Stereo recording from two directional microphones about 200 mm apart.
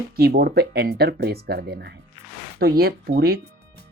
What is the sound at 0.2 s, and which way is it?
Speech, 55° right (ahead or behind).